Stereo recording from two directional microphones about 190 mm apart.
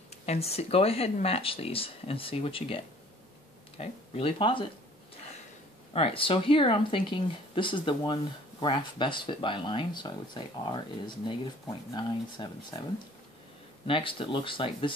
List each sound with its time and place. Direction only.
0.3 s speech: 35° left (ahead or behind)
5.9 s speech: 30° left (ahead or behind)
13.8 s speech: 25° left (ahead or behind)